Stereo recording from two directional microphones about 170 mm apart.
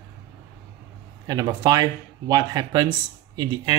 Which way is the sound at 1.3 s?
20° right (ahead or behind).